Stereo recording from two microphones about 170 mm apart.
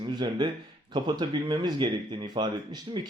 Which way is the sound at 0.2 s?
25° right (ahead or behind).